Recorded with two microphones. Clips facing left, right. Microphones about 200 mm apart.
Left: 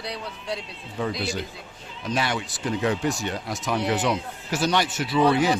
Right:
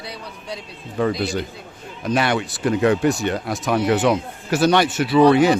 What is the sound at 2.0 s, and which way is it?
Speech, 60° right (ahead or behind).